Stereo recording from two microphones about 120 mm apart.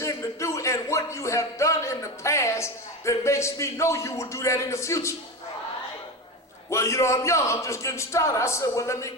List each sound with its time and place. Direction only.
0.0 s speech: 25° left (ahead or behind)
6.7 s a man's voice: 25° left (ahead or behind)